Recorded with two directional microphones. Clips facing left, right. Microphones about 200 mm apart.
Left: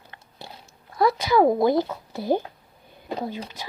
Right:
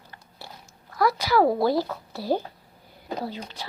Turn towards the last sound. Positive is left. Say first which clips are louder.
# left 2 dB
turn(degrees=20)  # may be behind; listen again after turning